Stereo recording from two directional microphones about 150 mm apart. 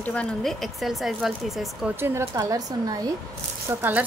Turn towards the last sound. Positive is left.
turn(degrees=-15)  # may be behind; listen again after turning